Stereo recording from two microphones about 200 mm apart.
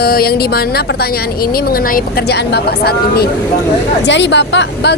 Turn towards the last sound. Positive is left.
turn(degrees=60)  # may be behind; listen again after turning